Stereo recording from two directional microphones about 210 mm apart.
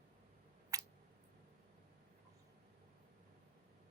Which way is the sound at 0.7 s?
15° right (ahead or behind).